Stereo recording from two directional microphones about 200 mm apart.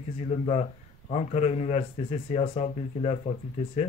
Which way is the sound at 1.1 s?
30° left (ahead or behind).